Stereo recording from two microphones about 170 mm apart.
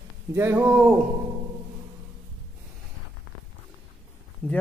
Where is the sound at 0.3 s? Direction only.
15° right (ahead or behind).